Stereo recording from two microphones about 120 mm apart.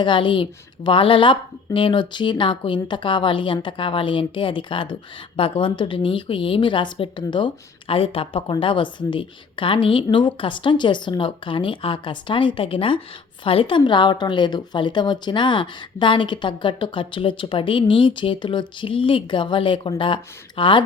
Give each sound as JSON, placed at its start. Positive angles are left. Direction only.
{"t": 0.0, "sound": "speech", "side_deg": 45}